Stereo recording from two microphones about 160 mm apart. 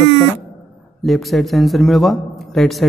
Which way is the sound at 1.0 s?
Centre (ahead or behind).